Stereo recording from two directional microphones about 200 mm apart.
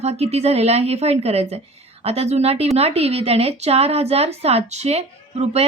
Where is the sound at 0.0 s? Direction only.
30° right (ahead or behind).